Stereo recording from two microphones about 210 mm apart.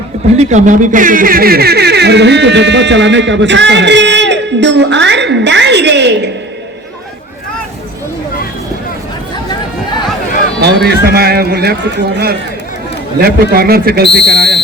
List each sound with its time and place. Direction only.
0.3 s speech: 35° right (ahead or behind); by 6.3 s 55° right (ahead or behind)
10.6 s a man's voice: 50° right (ahead or behind)
13.1 s a man's voice: 45° right (ahead or behind)